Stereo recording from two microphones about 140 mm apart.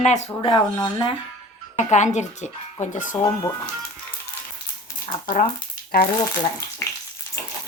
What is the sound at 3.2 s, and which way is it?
Speech, 25° left (ahead or behind).